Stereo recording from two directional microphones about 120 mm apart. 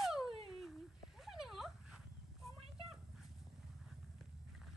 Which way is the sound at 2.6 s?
50° right (ahead or behind).